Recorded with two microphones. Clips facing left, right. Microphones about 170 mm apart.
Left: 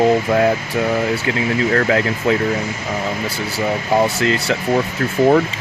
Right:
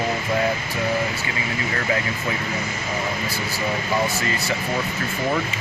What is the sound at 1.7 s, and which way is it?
Speech, 75° left (ahead or behind).